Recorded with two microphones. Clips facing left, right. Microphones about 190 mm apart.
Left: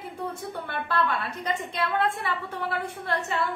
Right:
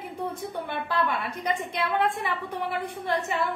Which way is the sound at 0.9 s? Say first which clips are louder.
Left 2 dB; 15° right (ahead or behind).